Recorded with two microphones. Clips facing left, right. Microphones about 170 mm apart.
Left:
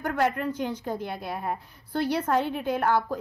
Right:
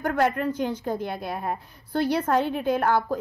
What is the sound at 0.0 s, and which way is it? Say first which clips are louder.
A woman's voice: right 3 dB; 40° right (ahead or behind).